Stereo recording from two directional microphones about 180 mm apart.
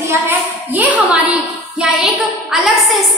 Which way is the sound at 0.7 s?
10° right (ahead or behind).